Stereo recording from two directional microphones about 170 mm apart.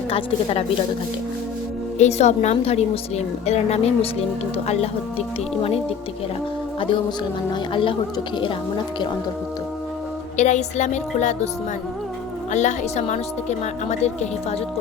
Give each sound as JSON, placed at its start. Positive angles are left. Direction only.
{"t": 0.1, "sound": "a woman's voice", "side_deg": 35}
{"t": 2.0, "sound": "a woman's voice", "side_deg": 40}
{"t": 7.5, "sound": "speech", "side_deg": 30}
{"t": 10.3, "sound": "speech", "side_deg": 45}
{"t": 12.5, "sound": "speech", "side_deg": 45}